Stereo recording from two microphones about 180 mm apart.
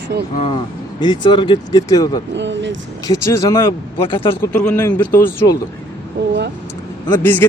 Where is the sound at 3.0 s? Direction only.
20° left (ahead or behind).